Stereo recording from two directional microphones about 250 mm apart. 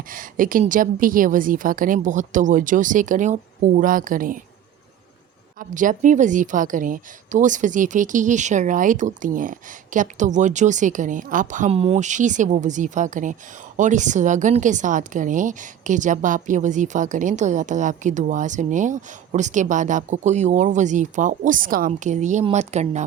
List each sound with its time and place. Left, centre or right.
0.1 s a woman's voice: right
5.5 s a woman's voice: right